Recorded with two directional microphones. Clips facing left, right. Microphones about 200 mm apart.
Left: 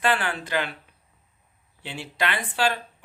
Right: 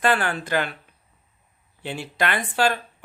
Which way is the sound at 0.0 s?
45° right (ahead or behind).